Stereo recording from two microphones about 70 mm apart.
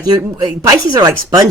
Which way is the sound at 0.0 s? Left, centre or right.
Right.